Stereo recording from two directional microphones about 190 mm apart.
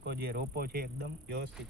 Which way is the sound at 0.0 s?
55° right (ahead or behind).